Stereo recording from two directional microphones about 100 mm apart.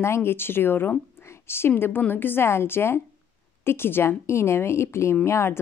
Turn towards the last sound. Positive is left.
turn(degrees=25)  # may be behind; listen again after turning